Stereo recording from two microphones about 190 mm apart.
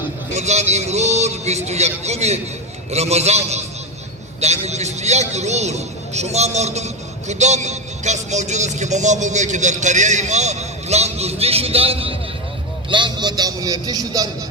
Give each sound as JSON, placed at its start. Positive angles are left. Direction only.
{"t": 0.3, "sound": "a man's voice", "side_deg": -35}